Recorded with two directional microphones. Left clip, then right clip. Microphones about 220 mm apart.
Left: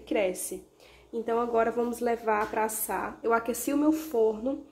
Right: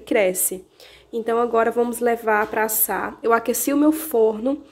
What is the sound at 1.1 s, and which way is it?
A woman's voice, 35° right (ahead or behind).